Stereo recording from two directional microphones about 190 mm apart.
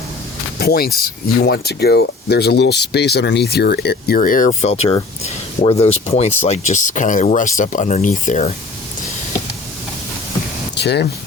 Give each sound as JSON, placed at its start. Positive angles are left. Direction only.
{"t": 0.6, "sound": "speech", "side_deg": 55}
{"t": 10.8, "sound": "speech", "side_deg": 60}